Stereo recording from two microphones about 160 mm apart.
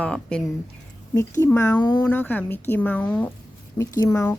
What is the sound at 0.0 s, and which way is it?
Speech, 5° left (ahead or behind).